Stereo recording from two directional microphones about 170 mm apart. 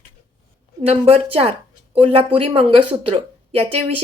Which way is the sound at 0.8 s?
35° right (ahead or behind).